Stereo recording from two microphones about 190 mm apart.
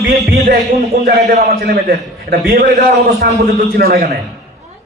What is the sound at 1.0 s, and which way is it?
A man's voice, 60° right (ahead or behind).